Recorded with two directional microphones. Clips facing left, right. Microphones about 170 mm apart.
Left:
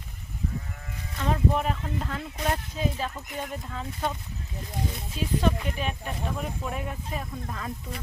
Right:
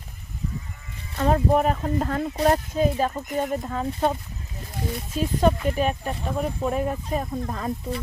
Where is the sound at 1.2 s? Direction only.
45° right (ahead or behind).